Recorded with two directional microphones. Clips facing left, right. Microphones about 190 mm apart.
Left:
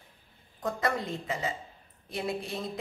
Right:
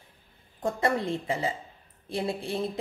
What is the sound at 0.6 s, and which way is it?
Speech, 30° right (ahead or behind).